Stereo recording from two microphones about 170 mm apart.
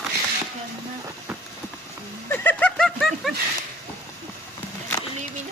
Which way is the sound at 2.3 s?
15° left (ahead or behind).